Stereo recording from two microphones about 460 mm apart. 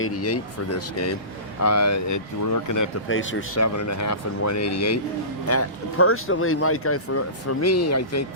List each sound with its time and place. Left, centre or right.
0.0 s speech: left
3.1 s speech: left